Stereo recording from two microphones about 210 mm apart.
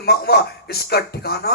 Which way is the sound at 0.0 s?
50° left (ahead or behind).